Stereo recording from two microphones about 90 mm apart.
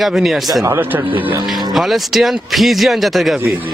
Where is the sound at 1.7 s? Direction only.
Centre (ahead or behind).